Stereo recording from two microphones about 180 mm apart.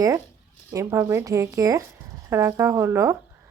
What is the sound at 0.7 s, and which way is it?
A woman's voice, 20° right (ahead or behind).